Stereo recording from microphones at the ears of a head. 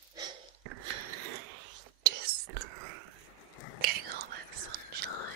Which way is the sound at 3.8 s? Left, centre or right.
Right.